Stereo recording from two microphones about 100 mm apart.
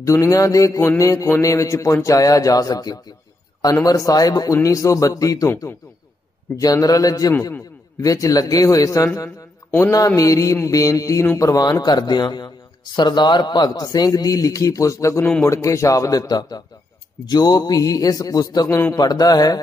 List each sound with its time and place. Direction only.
0.0 s speech: 30° left (ahead or behind)